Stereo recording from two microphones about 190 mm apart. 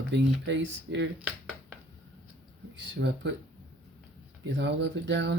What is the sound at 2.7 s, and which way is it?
Speech, 70° right (ahead or behind).